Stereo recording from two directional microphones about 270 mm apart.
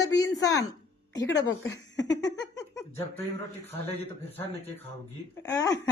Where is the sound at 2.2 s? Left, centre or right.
Centre.